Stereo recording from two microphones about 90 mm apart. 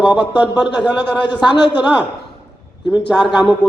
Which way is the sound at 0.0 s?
55° left (ahead or behind).